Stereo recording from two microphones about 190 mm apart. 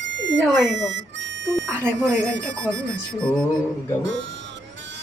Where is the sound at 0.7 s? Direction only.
75° right (ahead or behind).